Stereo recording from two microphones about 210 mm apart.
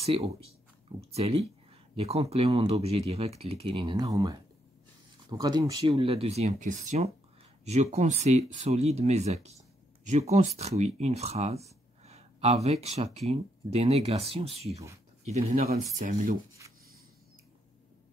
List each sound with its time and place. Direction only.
0.0 s speech: 30° right (ahead or behind)
3.8 s speech: 15° right (ahead or behind); by 16.3 s 40° right (ahead or behind)